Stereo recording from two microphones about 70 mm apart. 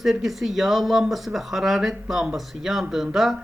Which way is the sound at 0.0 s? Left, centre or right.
Centre.